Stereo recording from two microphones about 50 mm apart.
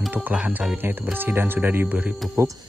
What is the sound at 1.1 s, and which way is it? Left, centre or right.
Speech, right.